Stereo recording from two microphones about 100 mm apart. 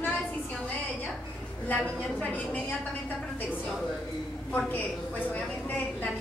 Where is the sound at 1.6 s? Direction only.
15° left (ahead or behind).